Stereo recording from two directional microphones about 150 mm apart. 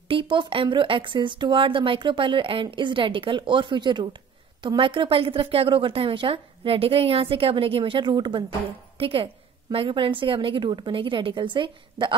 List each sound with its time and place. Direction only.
0.1 s speech: 35° right (ahead or behind)